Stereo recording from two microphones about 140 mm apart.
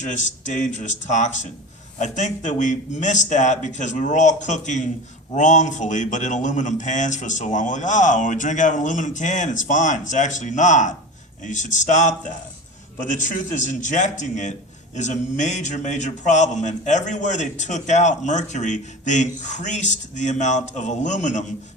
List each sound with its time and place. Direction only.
0.0 s a man's voice: 60° left (ahead or behind)